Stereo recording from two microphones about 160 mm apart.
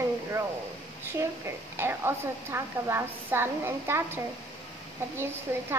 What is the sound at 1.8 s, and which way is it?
A woman's voice, 15° right (ahead or behind).